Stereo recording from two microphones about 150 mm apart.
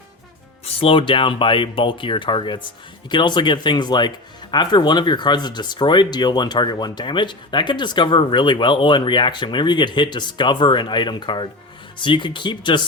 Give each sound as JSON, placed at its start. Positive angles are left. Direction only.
{"t": 0.6, "sound": "speech", "side_deg": 35}